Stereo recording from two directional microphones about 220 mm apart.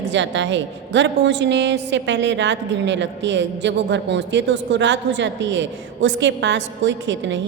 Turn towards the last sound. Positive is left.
turn(degrees=-55)  # may be behind; listen again after turning